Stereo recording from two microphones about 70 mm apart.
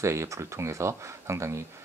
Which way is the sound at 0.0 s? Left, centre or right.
Right.